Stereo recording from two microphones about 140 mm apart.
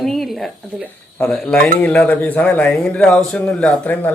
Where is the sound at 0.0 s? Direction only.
Centre (ahead or behind).